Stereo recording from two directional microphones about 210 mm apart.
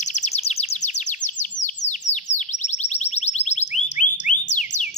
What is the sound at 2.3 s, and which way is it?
Music, 35° left (ahead or behind).